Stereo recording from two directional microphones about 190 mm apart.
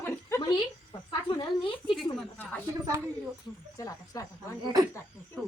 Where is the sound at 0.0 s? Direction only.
15° left (ahead or behind).